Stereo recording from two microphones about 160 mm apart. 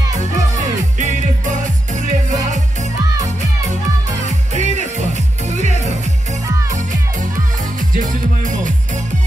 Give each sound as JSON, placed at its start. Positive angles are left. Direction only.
{"t": 0.2, "sound": "music", "side_deg": -50}
{"t": 4.3, "sound": "music", "side_deg": -50}